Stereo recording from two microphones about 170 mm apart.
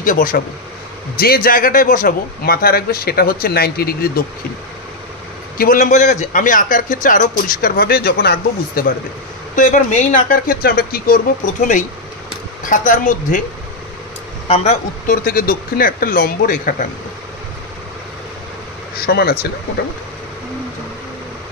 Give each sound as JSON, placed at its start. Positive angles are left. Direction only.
{"t": 0.0, "sound": "a man's voice", "side_deg": 55}
{"t": 5.6, "sound": "a man's voice", "side_deg": 50}
{"t": 9.6, "sound": "a man's voice", "side_deg": 45}
{"t": 14.5, "sound": "a man's voice", "side_deg": 40}
{"t": 18.9, "sound": "a man's voice", "side_deg": 65}